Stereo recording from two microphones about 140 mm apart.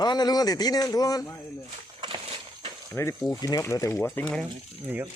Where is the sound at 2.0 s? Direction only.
40° right (ahead or behind).